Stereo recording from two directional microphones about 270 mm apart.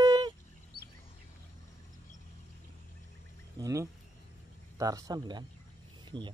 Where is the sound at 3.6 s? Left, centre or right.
Centre.